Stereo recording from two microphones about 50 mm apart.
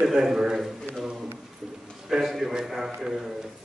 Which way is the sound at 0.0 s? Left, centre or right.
Centre.